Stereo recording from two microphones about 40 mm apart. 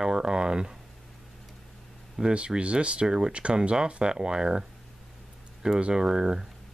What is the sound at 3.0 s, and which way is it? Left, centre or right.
Speech, centre.